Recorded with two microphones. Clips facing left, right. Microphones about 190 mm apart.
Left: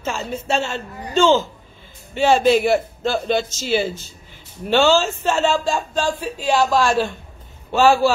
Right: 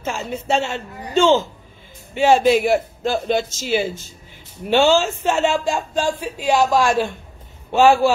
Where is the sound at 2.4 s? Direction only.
Centre (ahead or behind).